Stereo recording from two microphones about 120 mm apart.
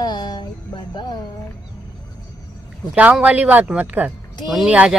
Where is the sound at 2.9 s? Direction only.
10° right (ahead or behind).